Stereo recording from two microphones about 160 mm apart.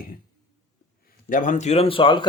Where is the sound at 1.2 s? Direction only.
55° left (ahead or behind); by 2.3 s 30° left (ahead or behind).